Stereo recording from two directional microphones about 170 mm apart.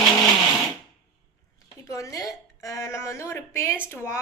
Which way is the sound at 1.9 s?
20° left (ahead or behind).